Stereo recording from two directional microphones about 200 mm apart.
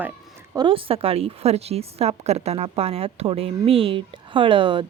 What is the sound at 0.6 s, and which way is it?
A woman's voice, 25° right (ahead or behind).